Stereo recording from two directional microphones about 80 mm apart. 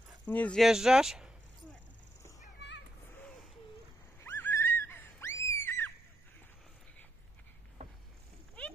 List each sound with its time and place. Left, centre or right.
0.3 s speech: centre
0.6 s speech: centre
4.2 s screaming: left